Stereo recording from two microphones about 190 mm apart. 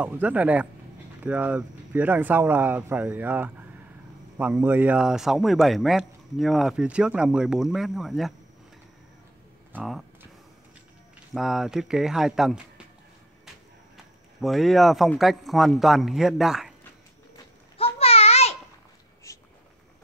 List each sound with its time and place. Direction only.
0.0 s a man's voice: 5° right (ahead or behind)
9.7 s speech: 5° right (ahead or behind)
11.3 s a man's voice: centre (ahead or behind)
14.4 s a man's voice: centre (ahead or behind)
17.7 s a sound: 30° left (ahead or behind)
19.3 s a sound: 15° left (ahead or behind)